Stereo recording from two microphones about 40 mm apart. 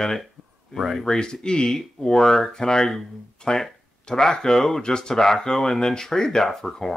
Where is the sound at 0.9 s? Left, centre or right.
Centre.